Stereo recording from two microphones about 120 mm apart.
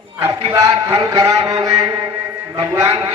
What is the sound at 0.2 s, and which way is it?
A man's voice, 25° right (ahead or behind).